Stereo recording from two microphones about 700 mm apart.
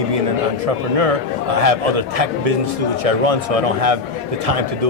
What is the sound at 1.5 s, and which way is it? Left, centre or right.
A man's voice, right.